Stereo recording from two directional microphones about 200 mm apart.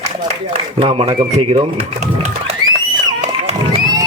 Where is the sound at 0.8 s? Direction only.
30° right (ahead or behind).